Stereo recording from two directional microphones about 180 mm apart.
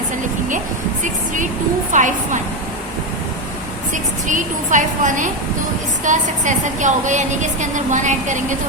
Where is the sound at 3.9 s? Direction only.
45° right (ahead or behind).